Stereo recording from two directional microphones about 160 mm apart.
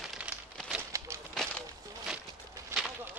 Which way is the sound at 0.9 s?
20° right (ahead or behind).